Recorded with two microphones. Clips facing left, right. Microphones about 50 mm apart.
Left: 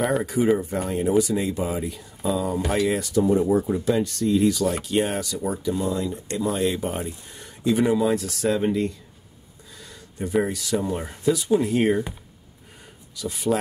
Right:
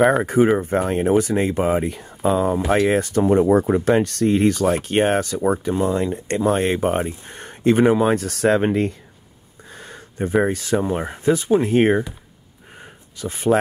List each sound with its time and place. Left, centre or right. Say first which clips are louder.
0.0 s speech: right 6 dB; right
13.1 s speech: right 5 dB; right